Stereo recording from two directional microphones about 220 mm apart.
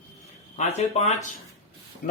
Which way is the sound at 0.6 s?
30° left (ahead or behind).